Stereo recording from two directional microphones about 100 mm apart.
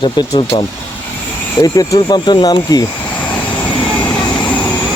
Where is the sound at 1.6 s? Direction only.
35° left (ahead or behind).